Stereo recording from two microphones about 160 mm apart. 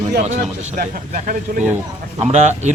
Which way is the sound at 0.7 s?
60° right (ahead or behind).